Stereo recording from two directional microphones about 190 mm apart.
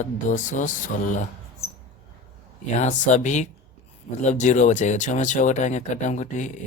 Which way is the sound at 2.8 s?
40° left (ahead or behind).